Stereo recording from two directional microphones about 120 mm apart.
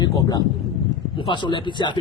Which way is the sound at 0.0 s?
35° left (ahead or behind).